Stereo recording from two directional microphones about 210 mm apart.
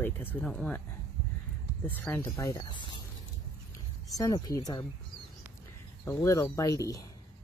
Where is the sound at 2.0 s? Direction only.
10° left (ahead or behind).